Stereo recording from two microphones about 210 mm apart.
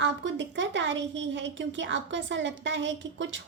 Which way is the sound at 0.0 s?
60° right (ahead or behind).